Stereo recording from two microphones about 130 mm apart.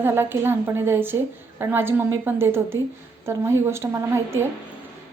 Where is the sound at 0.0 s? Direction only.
15° right (ahead or behind).